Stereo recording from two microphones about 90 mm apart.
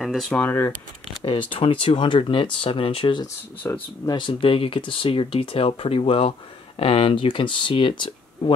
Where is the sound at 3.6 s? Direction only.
25° left (ahead or behind).